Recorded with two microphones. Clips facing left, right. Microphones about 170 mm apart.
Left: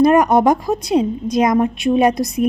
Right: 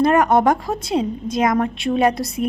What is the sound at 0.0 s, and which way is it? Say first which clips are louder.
A woman's voice: left 3 dB; 15° left (ahead or behind).